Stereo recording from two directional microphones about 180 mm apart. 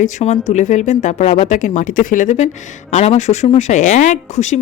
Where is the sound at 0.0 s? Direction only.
40° left (ahead or behind).